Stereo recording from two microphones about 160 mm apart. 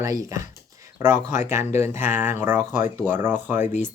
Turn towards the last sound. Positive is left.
turn(degrees=-15)  # may be behind; listen again after turning